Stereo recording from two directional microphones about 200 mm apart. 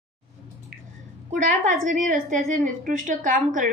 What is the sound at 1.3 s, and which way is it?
A woman's voice, 40° right (ahead or behind).